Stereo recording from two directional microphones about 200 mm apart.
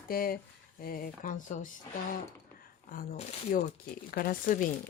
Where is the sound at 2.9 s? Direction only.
45° left (ahead or behind).